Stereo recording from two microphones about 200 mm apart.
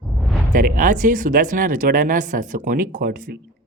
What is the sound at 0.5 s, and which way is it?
Speech, 40° right (ahead or behind).